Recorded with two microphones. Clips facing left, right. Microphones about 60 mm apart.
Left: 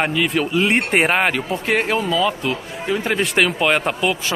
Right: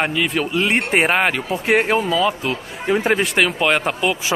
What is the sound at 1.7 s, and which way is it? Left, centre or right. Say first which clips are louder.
Speech: right 2 dB; centre.